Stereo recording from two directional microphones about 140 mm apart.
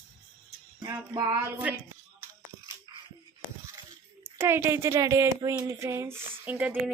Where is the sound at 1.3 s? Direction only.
10° right (ahead or behind).